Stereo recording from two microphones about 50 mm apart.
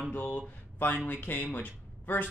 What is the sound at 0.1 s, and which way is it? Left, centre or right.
A man's voice, left.